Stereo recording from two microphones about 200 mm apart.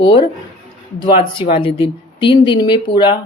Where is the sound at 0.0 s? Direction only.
20° left (ahead or behind).